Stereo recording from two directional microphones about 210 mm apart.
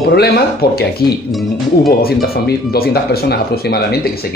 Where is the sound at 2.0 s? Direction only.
45° left (ahead or behind).